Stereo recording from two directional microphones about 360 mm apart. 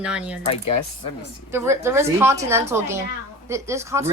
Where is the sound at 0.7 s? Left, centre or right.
Left.